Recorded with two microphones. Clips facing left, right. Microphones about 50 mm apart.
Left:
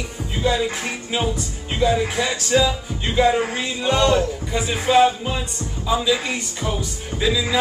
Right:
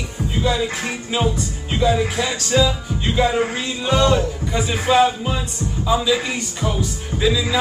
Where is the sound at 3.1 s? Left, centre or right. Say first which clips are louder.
Left 1 dB; centre.